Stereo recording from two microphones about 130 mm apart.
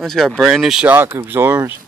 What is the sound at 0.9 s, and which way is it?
Speech, 15° right (ahead or behind).